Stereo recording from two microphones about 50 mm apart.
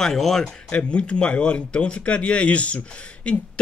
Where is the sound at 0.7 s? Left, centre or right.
Left.